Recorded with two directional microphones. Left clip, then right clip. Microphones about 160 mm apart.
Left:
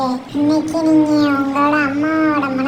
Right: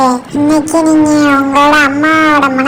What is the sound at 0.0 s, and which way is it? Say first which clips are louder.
A woman's voice: right 8 dB; 40° right (ahead or behind).